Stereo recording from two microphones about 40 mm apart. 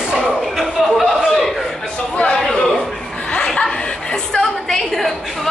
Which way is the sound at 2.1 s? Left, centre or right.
Left.